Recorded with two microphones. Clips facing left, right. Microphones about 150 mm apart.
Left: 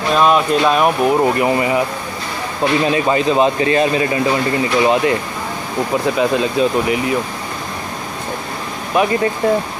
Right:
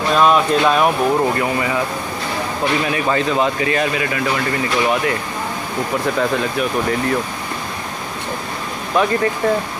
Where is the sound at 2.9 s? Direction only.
20° left (ahead or behind).